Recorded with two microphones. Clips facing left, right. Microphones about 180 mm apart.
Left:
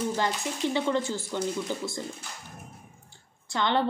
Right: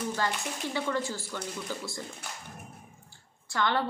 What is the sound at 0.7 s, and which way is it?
A woman's voice, 20° left (ahead or behind).